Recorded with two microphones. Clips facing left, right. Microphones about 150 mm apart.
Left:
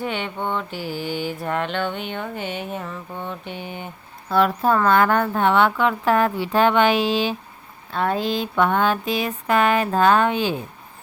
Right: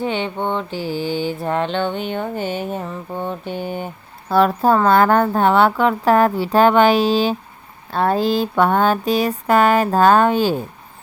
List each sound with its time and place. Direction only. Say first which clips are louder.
0.0 s mantra: right 4 dB; 30° right (ahead or behind)